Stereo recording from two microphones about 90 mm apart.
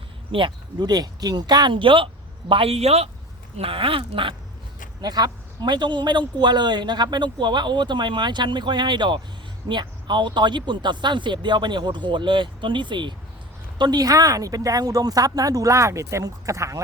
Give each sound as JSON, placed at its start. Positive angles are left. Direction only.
{"t": 0.3, "sound": "speech", "side_deg": -70}
{"t": 0.9, "sound": "speech", "side_deg": -45}
{"t": 2.5, "sound": "speech", "side_deg": -85}
{"t": 4.9, "sound": "a man's voice", "side_deg": -50}